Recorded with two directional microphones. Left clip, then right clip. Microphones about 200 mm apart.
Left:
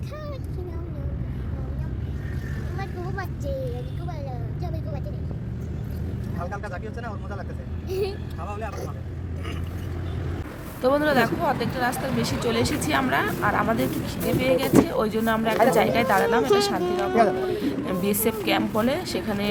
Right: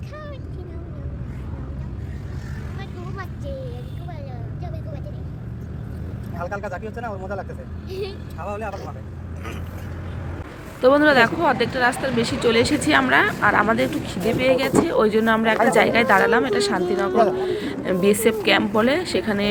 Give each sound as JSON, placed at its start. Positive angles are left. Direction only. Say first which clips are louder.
{"t": 6.6, "sound": "speech", "louder": "right 5 dB", "side_deg": -45}
{"t": 7.9, "sound": "speech", "louder": "left 3 dB", "side_deg": 10}
{"t": 10.8, "sound": "speech", "louder": "right 6 dB", "side_deg": -15}